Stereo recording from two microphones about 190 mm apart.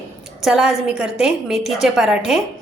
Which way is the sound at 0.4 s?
5° right (ahead or behind).